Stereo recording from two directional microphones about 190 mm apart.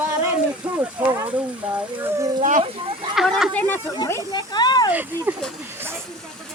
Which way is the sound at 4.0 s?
20° left (ahead or behind).